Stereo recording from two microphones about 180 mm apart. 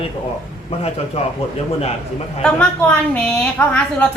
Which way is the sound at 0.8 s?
35° left (ahead or behind).